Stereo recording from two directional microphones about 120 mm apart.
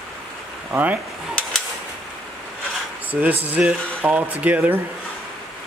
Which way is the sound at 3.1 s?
15° right (ahead or behind).